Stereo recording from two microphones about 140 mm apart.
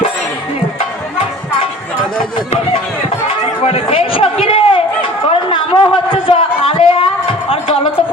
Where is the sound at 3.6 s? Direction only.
45° left (ahead or behind).